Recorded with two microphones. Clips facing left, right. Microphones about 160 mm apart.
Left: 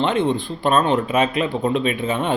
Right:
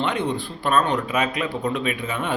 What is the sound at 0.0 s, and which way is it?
A man's voice, 25° left (ahead or behind).